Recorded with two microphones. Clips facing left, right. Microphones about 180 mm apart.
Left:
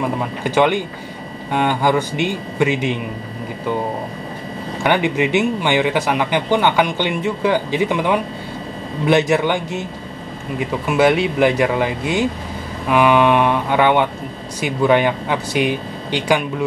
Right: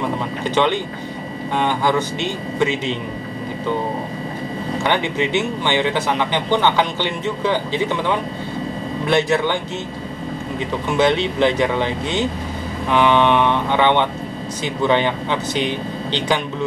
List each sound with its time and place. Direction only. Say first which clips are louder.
0.4 s speech: left 3 dB; 10° left (ahead or behind)
4.8 s speech: left 4 dB; 15° left (ahead or behind)
10.9 s speech: left 2 dB; 10° left (ahead or behind)